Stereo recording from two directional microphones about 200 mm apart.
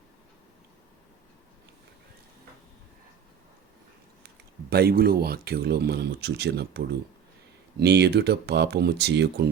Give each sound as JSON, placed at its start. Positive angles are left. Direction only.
{"t": 4.7, "sound": "speech", "side_deg": -50}